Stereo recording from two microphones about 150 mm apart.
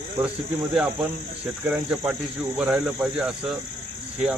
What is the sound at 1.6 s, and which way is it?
Speech, 10° right (ahead or behind).